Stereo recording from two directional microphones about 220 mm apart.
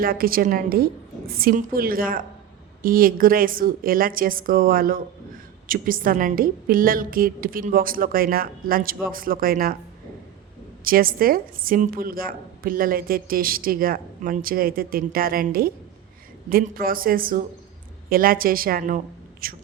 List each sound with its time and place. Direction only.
0.0 s a woman's voice: 40° right (ahead or behind)
10.8 s a woman's voice: 40° right (ahead or behind)